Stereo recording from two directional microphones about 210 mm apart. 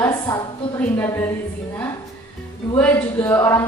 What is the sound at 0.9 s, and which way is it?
Speech, 10° left (ahead or behind).